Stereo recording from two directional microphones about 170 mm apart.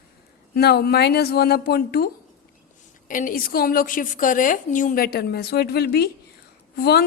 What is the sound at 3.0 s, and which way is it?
A woman's voice, 50° left (ahead or behind).